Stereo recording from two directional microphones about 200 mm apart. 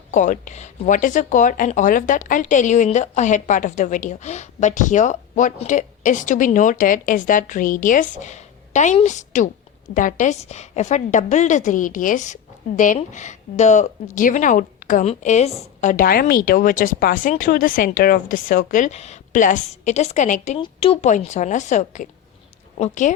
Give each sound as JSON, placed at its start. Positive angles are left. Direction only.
{"t": 0.1, "sound": "a woman's voice", "side_deg": 40}
{"t": 20.6, "sound": "a woman's voice", "side_deg": 25}